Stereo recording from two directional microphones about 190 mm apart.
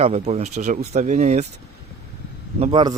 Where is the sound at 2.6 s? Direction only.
25° right (ahead or behind).